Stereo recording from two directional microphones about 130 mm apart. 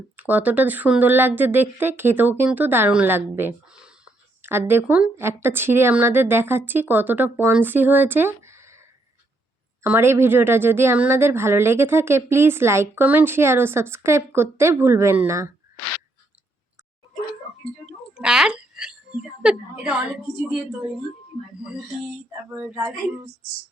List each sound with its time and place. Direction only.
0.2 s speech: 10° right (ahead or behind)
3.7 s whispering: 5° right (ahead or behind)
4.5 s speech: 15° right (ahead or behind)
9.8 s a woman's voice: 15° right (ahead or behind)
18.1 s a woman's voice: 5° right (ahead or behind)
21.4 s speech: 5° right (ahead or behind)